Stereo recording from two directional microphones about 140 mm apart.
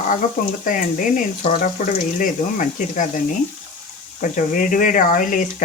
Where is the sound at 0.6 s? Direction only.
75° left (ahead or behind).